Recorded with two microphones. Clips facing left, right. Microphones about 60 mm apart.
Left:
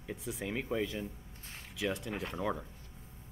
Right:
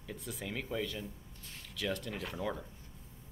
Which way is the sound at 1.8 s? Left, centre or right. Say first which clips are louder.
Left 2 dB; centre.